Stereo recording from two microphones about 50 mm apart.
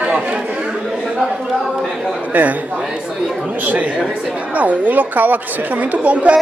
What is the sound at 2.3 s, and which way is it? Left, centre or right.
A man's voice, right.